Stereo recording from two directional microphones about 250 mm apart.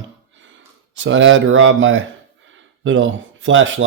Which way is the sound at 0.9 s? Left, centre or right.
Right.